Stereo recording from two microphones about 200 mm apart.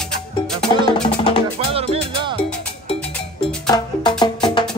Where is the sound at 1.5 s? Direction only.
30° right (ahead or behind).